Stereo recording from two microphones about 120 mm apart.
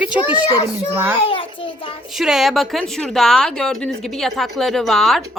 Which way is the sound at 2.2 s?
Centre (ahead or behind).